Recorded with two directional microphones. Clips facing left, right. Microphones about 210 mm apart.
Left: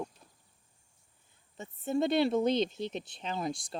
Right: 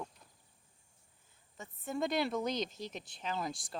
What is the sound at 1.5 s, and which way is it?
Speech, 20° left (ahead or behind).